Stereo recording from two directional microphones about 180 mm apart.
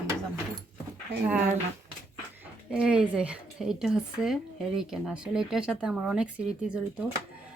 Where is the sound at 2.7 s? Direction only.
5° right (ahead or behind).